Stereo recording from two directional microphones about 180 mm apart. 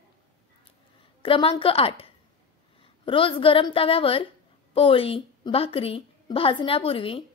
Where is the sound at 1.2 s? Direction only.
30° left (ahead or behind).